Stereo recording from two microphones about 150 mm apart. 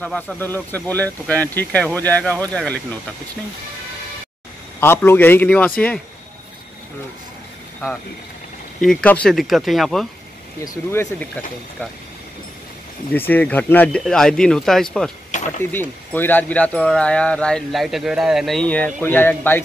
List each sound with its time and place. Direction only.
0.0 s speech: 5° left (ahead or behind)
4.7 s speech: 15° left (ahead or behind)
8.8 s speech: 5° left (ahead or behind)
10.6 s speech: 20° left (ahead or behind)
13.1 s speech: 10° left (ahead or behind)
15.6 s speech: 15° left (ahead or behind)